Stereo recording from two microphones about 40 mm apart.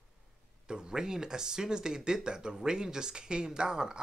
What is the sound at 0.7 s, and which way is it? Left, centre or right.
Speech, centre.